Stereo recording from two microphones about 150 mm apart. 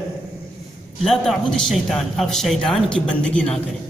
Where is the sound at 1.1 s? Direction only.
5° left (ahead or behind).